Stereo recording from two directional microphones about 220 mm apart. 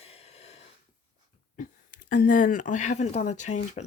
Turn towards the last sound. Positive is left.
turn(degrees=30)  # may be behind; listen again after turning